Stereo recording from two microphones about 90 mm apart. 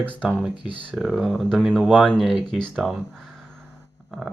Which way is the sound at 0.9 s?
Centre (ahead or behind).